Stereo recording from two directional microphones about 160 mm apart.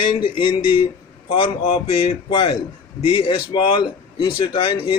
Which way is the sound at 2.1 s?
30° left (ahead or behind).